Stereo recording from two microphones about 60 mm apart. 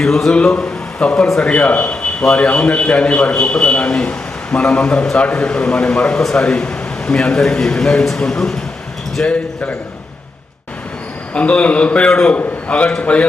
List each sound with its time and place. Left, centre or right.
0.0 s a man's voice: centre
9.2 s a man's voice: left
11.3 s a man's voice: left